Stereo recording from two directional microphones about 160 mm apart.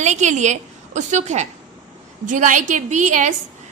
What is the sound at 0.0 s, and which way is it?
A woman's voice, 45° right (ahead or behind).